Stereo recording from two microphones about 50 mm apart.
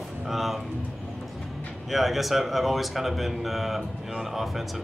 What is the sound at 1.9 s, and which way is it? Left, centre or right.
Speech, centre.